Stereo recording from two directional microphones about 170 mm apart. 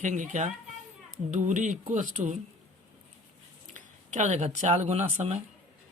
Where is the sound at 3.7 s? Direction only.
45° right (ahead or behind).